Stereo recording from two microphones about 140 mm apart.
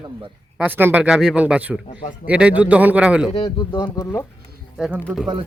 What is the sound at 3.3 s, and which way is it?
Speech, 35° left (ahead or behind).